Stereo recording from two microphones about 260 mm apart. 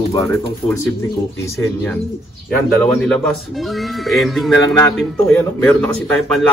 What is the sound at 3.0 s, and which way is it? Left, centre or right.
Speech, centre.